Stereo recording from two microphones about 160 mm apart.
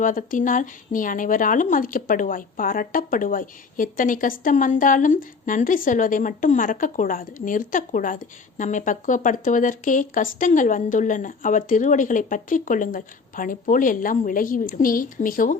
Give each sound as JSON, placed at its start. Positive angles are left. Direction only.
{"t": 0.0, "sound": "speech", "side_deg": 55}